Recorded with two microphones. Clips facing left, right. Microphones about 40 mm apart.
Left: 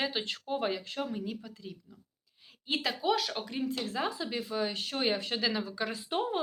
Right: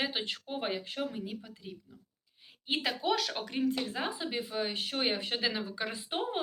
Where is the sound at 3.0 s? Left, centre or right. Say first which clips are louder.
Left 1 dB; right.